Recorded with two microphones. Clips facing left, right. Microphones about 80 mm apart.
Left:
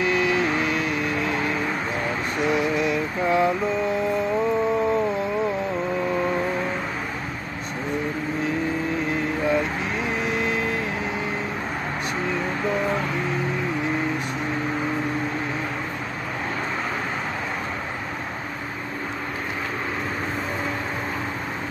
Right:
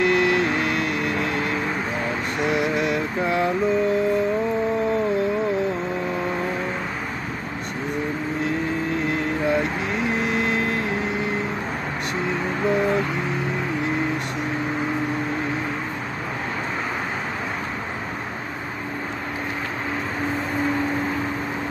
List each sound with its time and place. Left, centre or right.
0.0 s vehicle: right